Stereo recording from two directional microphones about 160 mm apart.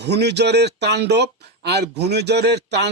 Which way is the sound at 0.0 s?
90° right.